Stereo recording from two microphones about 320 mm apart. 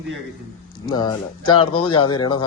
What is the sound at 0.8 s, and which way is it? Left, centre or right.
A man's voice, centre.